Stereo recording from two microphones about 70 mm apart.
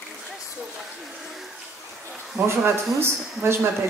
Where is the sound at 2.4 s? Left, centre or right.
Right.